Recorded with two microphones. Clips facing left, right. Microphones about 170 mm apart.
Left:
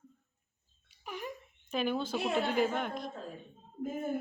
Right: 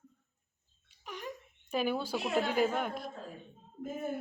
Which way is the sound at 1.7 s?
10° right (ahead or behind).